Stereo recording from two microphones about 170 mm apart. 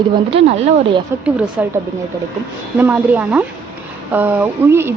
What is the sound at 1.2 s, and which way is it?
Speech, 5° right (ahead or behind).